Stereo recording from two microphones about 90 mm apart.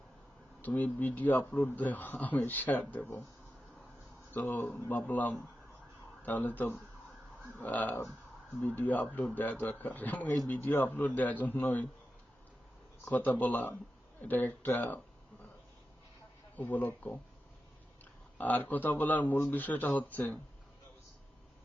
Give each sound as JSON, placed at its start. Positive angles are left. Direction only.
{"t": 0.6, "sound": "speech", "side_deg": 20}
{"t": 4.4, "sound": "speech", "side_deg": 20}
{"t": 13.1, "sound": "speech", "side_deg": 20}
{"t": 16.6, "sound": "speech", "side_deg": 20}
{"t": 18.3, "sound": "speech", "side_deg": 20}